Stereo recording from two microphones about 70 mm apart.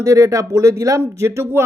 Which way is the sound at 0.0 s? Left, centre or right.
Right.